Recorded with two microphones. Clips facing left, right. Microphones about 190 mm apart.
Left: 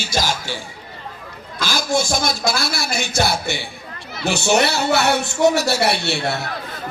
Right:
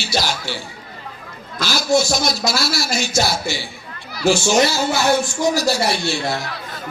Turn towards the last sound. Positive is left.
turn(degrees=65)  # may be behind; listen again after turning